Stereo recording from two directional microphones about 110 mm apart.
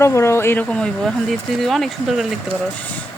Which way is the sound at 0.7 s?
5° left (ahead or behind).